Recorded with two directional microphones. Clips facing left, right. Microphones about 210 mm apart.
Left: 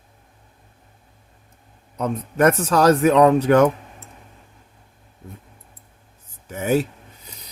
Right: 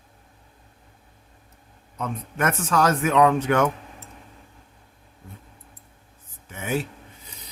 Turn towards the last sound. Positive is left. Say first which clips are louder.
# left 7 dB
turn(degrees=40)  # may be behind; listen again after turning